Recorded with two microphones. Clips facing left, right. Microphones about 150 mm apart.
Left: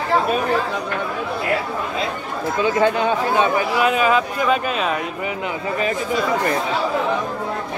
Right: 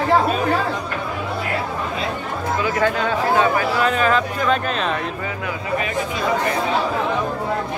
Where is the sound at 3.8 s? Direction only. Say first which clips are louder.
Left 1 dB; 10° left (ahead or behind).